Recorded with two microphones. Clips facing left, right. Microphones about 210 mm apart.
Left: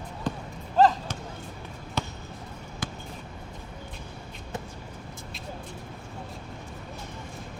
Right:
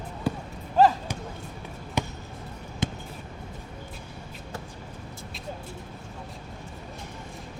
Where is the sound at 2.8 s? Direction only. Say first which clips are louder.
Right 6 dB; 25° right (ahead or behind).